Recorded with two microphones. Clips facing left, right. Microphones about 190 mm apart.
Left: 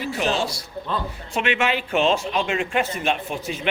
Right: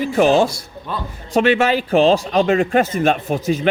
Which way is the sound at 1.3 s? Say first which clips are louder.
Right 8 dB; 35° right (ahead or behind).